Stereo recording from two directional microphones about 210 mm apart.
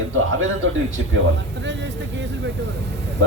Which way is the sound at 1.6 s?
55° right (ahead or behind).